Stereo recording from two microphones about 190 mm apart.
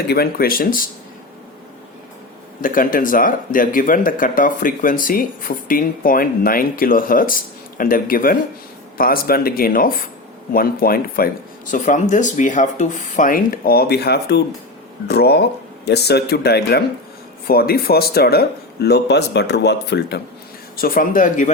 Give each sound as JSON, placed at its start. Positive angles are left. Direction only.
{"t": 0.1, "sound": "speech", "side_deg": 55}
{"t": 2.6, "sound": "speech", "side_deg": 45}
{"t": 20.7, "sound": "speech", "side_deg": 50}